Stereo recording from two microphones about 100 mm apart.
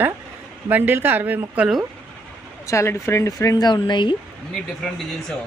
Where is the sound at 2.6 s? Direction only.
30° left (ahead or behind); by 4.2 s 50° left (ahead or behind).